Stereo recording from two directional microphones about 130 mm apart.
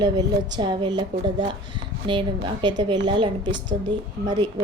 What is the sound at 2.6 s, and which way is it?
A woman's voice, 35° right (ahead or behind).